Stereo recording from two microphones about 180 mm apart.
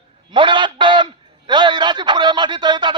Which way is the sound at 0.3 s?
25° right (ahead or behind).